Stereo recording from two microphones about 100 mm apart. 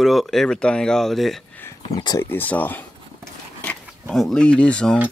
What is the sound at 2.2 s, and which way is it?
Speech, 20° left (ahead or behind).